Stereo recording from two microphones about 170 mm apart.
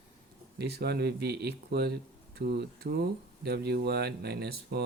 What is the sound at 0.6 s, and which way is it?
Speech, 70° right (ahead or behind).